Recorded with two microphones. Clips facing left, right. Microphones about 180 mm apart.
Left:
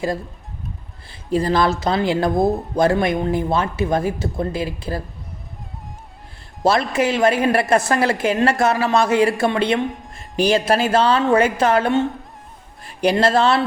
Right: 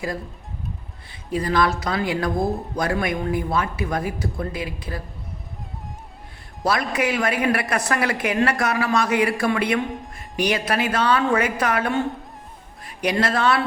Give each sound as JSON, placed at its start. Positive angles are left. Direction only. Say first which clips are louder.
{"t": 1.3, "sound": "a woman's voice", "louder": "left 3 dB", "side_deg": 30}
{"t": 6.6, "sound": "a woman's voice", "louder": "left 5 dB", "side_deg": 25}